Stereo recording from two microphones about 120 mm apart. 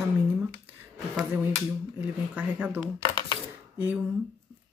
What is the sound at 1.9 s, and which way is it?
Speech, 15° right (ahead or behind).